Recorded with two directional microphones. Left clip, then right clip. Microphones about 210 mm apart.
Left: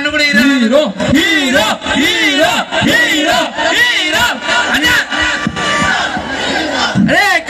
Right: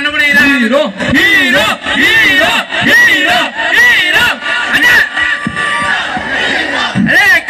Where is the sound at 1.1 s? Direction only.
45° left (ahead or behind).